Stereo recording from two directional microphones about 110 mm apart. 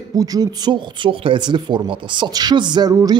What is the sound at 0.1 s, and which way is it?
Speech, 35° right (ahead or behind).